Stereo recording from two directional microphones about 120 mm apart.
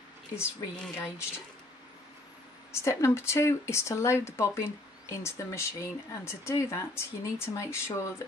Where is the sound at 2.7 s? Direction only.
25° left (ahead or behind).